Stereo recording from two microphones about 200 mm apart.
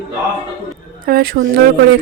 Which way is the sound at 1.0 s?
50° right (ahead or behind).